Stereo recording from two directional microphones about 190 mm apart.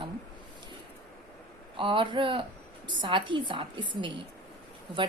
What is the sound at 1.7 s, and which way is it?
A woman's voice, 25° right (ahead or behind).